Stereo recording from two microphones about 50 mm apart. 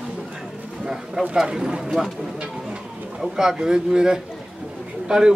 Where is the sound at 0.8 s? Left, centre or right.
Centre.